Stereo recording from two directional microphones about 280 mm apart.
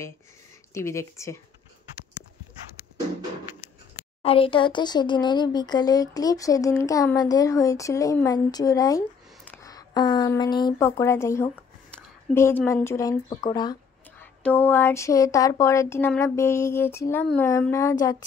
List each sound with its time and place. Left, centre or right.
0.7 s speech: centre
4.2 s speech: centre